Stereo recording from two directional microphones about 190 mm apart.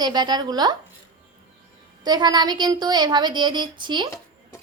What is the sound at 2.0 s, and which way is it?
A woman's voice, 25° right (ahead or behind).